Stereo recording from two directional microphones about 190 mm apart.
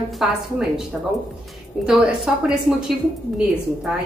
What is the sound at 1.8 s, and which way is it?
A woman's voice, 5° right (ahead or behind).